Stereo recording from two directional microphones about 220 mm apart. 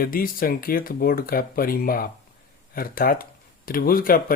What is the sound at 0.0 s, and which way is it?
Speech, 40° left (ahead or behind).